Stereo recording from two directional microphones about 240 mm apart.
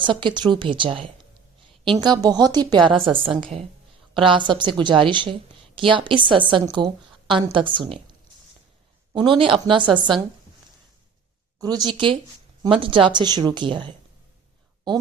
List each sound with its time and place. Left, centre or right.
0.0 s a woman's voice: centre
9.1 s a woman's voice: right
11.6 s a woman's voice: centre